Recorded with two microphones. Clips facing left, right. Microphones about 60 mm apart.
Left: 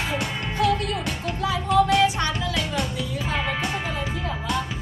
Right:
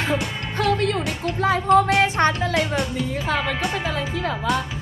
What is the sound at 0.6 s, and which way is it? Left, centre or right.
Music, right.